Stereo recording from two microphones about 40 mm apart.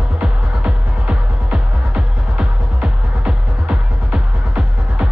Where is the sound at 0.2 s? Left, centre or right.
Right.